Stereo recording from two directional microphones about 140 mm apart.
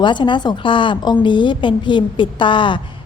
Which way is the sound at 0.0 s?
35° left (ahead or behind).